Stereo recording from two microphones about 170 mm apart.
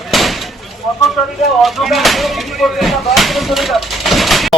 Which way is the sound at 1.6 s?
Centre (ahead or behind).